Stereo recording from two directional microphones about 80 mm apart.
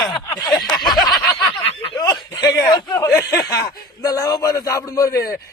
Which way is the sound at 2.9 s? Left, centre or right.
Left.